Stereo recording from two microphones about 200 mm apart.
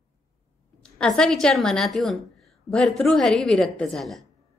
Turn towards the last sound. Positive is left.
turn(degrees=0)  # may be behind; listen again after turning